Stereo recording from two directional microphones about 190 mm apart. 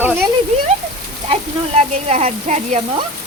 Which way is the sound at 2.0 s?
35° right (ahead or behind).